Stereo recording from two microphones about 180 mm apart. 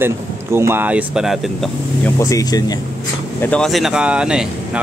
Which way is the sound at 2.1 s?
20° left (ahead or behind).